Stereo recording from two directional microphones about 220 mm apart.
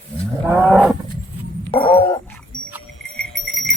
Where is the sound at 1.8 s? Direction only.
20° left (ahead or behind).